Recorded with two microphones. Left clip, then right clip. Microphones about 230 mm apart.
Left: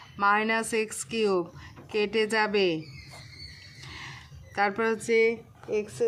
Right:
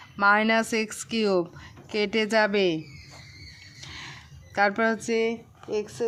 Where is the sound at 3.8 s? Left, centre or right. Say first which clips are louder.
Right 2 dB; right.